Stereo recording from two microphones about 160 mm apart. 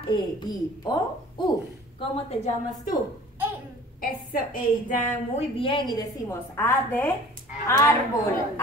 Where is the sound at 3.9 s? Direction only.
60° left (ahead or behind).